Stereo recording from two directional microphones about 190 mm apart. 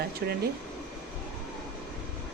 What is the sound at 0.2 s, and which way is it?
Speech, 55° right (ahead or behind).